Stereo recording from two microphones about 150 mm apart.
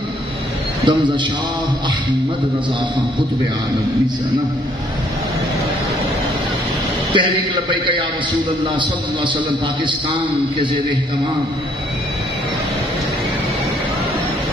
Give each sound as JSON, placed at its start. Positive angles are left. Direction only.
{"t": 0.8, "sound": "a man's voice", "side_deg": -30}
{"t": 7.1, "sound": "a man's voice", "side_deg": -35}